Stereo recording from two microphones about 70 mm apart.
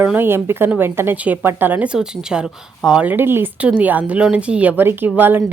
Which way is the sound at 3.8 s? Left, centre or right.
Right.